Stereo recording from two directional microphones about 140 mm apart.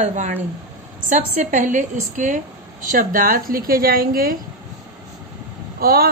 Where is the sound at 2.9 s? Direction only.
85° right.